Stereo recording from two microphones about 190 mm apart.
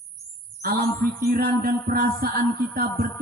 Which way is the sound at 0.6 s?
50° right (ahead or behind).